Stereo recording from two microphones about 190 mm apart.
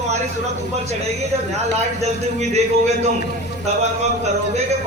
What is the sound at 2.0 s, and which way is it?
Speech, 35° right (ahead or behind).